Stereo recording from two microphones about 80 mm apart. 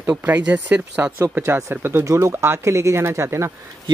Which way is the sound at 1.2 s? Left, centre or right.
Right.